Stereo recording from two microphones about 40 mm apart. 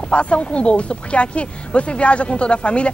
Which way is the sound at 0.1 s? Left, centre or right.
Left.